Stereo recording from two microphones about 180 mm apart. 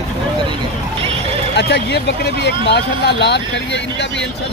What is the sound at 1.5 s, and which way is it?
Speech, 70° left (ahead or behind).